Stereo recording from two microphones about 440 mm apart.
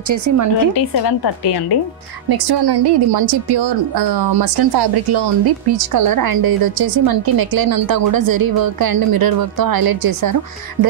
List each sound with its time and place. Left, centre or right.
0.1 s a woman's voice: right
0.7 s a woman's voice: left
2.2 s a woman's voice: right